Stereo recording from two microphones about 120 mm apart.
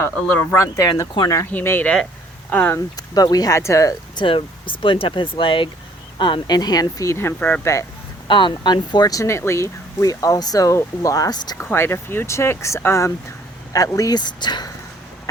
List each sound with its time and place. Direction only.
0.0 s speech: 25° left (ahead or behind)
1.5 s speech: 15° left (ahead or behind)
2.9 s speech: 30° left (ahead or behind)
4.1 s speech: 45° left (ahead or behind); by 7.7 s 15° left (ahead or behind)
8.3 s speech: 40° left (ahead or behind)
11.5 s speech: 20° left (ahead or behind); by 14.7 s 40° left (ahead or behind)